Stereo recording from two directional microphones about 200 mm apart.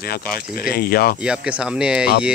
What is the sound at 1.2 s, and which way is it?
Speech, 5° right (ahead or behind).